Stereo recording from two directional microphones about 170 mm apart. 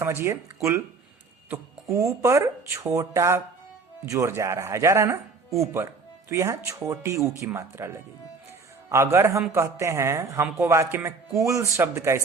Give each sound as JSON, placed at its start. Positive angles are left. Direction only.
{"t": 0.0, "sound": "speech", "side_deg": -15}